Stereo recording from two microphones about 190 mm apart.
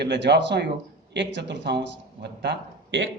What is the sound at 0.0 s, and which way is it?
Speech, 65° right (ahead or behind).